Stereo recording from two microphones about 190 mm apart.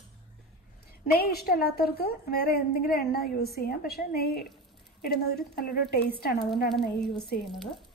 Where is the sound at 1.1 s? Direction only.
55° left (ahead or behind).